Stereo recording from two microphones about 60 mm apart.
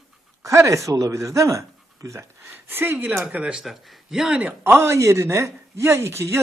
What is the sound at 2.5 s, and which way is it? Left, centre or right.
Speech, right.